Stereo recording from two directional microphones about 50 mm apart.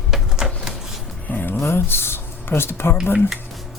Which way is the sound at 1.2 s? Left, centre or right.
Left.